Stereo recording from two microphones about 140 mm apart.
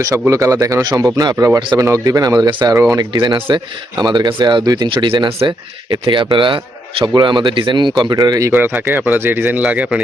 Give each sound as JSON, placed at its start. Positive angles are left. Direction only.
{"t": 0.0, "sound": "speech", "side_deg": -25}